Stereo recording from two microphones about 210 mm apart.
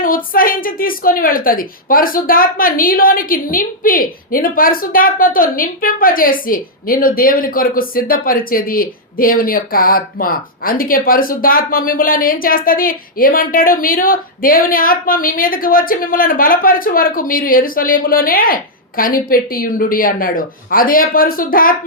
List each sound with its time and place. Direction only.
0.3 s a woman's voice: 40° left (ahead or behind)